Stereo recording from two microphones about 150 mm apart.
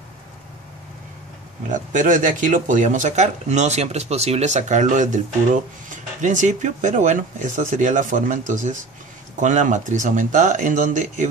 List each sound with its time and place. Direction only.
1.7 s speech: 55° right (ahead or behind)
6.2 s speech: 55° right (ahead or behind)